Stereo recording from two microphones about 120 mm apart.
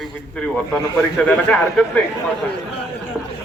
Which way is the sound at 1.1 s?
10° left (ahead or behind).